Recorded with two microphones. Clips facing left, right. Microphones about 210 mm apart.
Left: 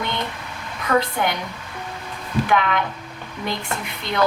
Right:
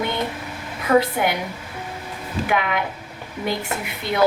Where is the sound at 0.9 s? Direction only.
25° right (ahead or behind).